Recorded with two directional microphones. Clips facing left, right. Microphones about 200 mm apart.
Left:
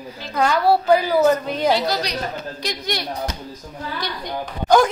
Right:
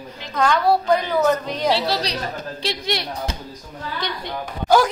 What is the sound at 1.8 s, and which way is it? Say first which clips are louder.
A woman's voice: even; 30° right (ahead or behind).